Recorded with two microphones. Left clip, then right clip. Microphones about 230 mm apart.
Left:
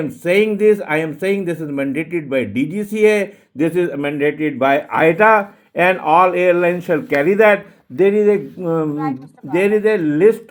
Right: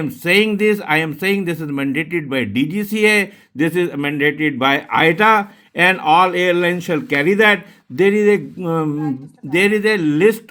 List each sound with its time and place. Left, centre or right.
0.0 s a man's voice: right